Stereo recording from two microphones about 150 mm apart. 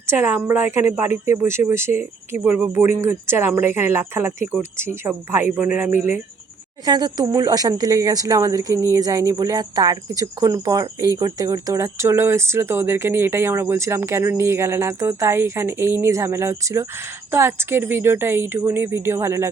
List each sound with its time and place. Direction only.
0.1 s speech: 15° right (ahead or behind)
6.8 s speech: 25° right (ahead or behind)